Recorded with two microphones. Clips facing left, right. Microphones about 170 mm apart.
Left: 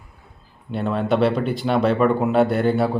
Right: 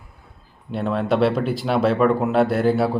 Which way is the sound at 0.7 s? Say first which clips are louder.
Even; centre (ahead or behind).